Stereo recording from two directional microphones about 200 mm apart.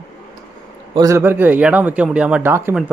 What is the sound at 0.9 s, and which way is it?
A man's voice, 15° right (ahead or behind).